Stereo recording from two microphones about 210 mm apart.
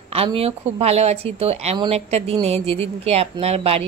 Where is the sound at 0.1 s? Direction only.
25° right (ahead or behind).